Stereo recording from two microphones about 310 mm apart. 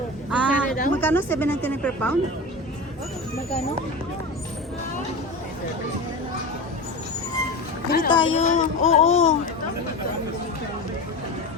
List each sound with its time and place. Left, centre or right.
0.3 s a sound: centre
1.0 s a woman's voice: centre
7.9 s a woman's voice: left